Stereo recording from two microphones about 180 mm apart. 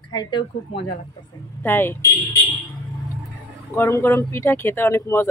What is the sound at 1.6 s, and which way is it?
Speech, 10° left (ahead or behind).